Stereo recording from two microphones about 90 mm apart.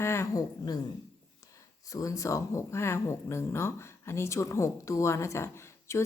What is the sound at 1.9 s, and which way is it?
A woman's voice, 40° left (ahead or behind).